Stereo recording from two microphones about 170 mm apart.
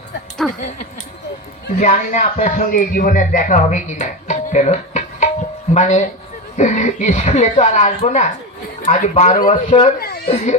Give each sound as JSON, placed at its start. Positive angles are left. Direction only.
{"t": 0.4, "sound": "speech", "side_deg": 0}
{"t": 1.8, "sound": "speech", "side_deg": 45}
{"t": 9.8, "sound": "speech", "side_deg": 65}
{"t": 10.2, "sound": "speech", "side_deg": 40}